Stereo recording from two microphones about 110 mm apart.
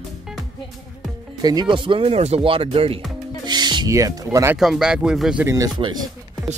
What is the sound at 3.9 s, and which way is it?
Speech, 30° right (ahead or behind).